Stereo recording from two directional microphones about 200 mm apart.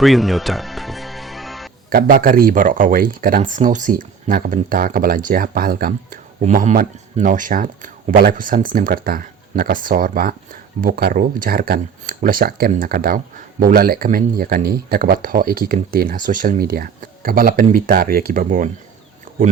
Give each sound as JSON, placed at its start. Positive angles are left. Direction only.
{"t": 0.0, "sound": "music", "side_deg": 0}
{"t": 1.9, "sound": "speech", "side_deg": -45}